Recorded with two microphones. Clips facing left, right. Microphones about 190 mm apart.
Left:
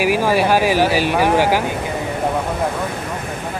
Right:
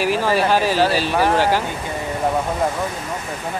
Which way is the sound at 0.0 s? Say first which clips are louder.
Left 2 dB; 10° left (ahead or behind).